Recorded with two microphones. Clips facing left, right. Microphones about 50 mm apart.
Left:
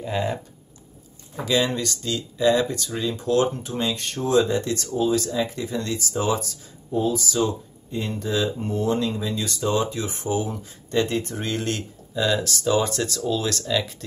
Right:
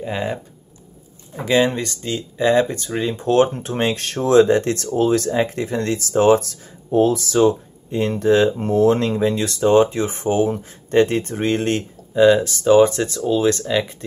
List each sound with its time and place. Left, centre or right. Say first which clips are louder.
0.0 s speech: right 2 dB; right
1.4 s speech: right 5 dB; right
8.6 s speech: right 8 dB; right